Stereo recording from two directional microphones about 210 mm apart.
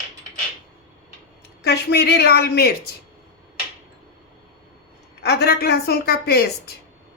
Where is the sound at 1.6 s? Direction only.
50° left (ahead or behind).